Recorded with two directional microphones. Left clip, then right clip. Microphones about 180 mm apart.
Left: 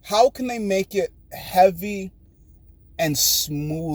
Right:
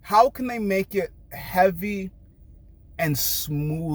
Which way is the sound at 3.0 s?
20° right (ahead or behind).